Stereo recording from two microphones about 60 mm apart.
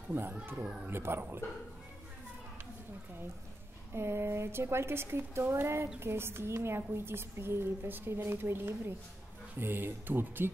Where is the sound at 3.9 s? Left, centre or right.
Right.